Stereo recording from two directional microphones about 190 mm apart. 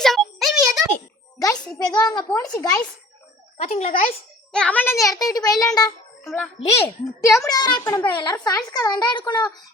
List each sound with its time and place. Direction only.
0.0 s music: centre (ahead or behind)
1.9 s a child's voice: 20° left (ahead or behind)
3.6 s speech: 35° left (ahead or behind)
4.5 s a child's voice: 5° left (ahead or behind)
6.2 s a child's voice: 5° left (ahead or behind)
6.7 s a child's voice: 15° left (ahead or behind)